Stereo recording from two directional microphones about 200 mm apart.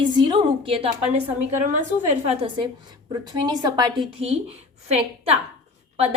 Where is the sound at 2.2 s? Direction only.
25° right (ahead or behind).